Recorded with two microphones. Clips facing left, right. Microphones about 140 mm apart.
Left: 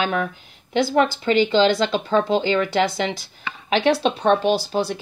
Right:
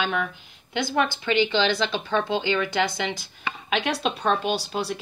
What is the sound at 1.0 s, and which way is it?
Speech, 35° left (ahead or behind).